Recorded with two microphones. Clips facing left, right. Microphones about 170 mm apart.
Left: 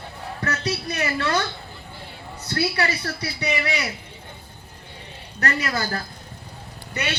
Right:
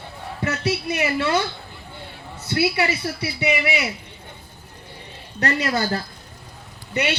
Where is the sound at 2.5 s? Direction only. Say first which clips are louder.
Right 3 dB; 10° right (ahead or behind).